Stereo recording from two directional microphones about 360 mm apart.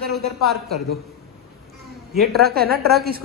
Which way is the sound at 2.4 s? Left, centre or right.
Right.